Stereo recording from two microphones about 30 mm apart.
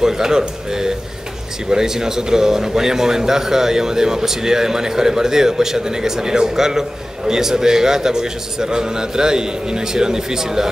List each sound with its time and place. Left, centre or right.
0.0 s a man's voice: centre